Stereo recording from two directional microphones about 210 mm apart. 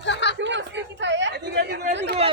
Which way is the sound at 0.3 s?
60° right (ahead or behind).